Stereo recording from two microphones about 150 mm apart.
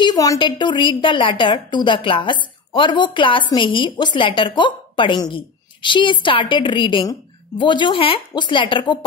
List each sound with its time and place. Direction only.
0.0 s a woman's voice: 25° left (ahead or behind)